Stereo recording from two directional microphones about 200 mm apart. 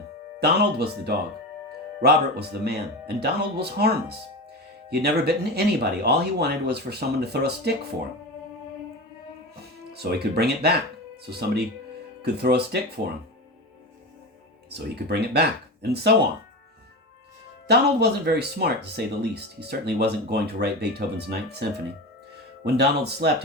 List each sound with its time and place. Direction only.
0.3 s speech: 55° right (ahead or behind)
9.9 s speech: 55° right (ahead or behind)
14.7 s speech: 55° right (ahead or behind)
17.7 s speech: 55° right (ahead or behind)